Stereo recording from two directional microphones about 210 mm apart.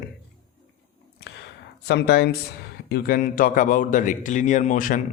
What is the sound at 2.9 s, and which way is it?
Speech, 45° left (ahead or behind).